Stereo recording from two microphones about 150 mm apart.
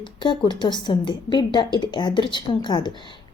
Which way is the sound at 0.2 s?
30° left (ahead or behind).